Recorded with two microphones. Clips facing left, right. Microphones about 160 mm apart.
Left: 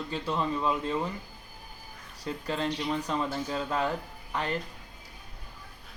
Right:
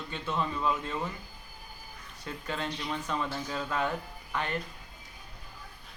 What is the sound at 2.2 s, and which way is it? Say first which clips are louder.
Speech: left 4 dB; 35° left (ahead or behind).